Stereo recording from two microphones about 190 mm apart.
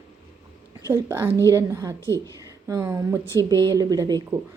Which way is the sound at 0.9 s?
10° right (ahead or behind).